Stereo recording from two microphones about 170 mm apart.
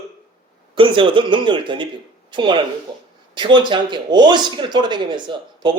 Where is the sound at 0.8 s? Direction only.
30° right (ahead or behind).